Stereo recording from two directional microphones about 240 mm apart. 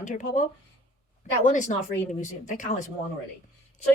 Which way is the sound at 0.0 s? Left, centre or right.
Left.